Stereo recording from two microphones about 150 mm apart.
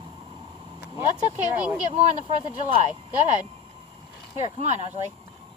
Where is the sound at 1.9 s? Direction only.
45° right (ahead or behind).